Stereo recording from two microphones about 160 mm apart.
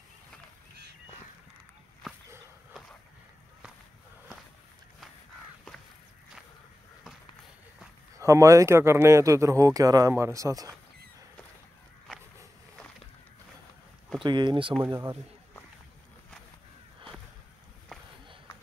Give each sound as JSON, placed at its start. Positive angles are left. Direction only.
{"t": 8.2, "sound": "speech", "side_deg": -20}
{"t": 14.2, "sound": "speech", "side_deg": -30}
{"t": 14.8, "sound": "speech", "side_deg": -15}